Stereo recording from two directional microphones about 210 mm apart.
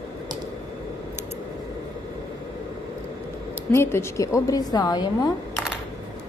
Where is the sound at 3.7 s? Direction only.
10° left (ahead or behind).